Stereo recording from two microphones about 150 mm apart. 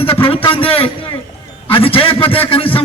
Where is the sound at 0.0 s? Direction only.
40° left (ahead or behind).